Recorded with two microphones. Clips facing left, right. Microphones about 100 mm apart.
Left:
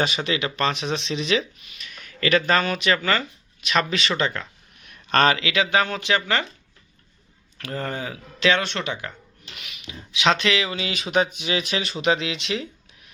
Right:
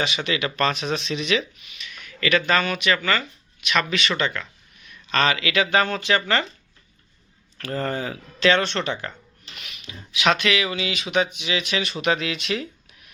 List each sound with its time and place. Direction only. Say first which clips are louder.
0.0 s speech: left 1 dB; 35° left (ahead or behind)
4.9 s a sound: left 3 dB; 50° left (ahead or behind)
5.4 s speech: right 1 dB; 20° left (ahead or behind)
7.6 s speech: right 3 dB; 15° left (ahead or behind)
9.8 s speech: even; 25° left (ahead or behind)